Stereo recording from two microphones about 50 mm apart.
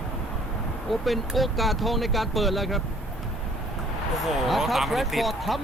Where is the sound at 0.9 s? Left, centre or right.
Centre.